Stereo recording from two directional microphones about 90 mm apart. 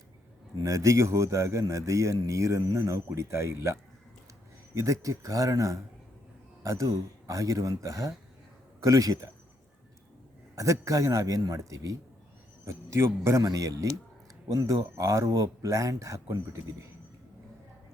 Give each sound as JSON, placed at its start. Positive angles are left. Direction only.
{"t": 0.5, "sound": "a man's voice", "side_deg": -35}
{"t": 10.5, "sound": "a man's voice", "side_deg": -40}